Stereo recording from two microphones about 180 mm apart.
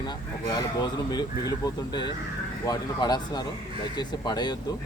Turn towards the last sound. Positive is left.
turn(degrees=25)  # may be behind; listen again after turning